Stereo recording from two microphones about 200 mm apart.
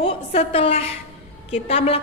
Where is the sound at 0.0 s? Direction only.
30° left (ahead or behind).